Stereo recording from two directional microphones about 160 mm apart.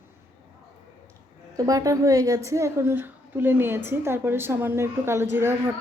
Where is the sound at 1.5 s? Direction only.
20° right (ahead or behind).